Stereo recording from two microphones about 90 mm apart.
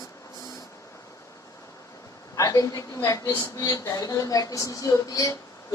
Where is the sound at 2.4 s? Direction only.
40° left (ahead or behind).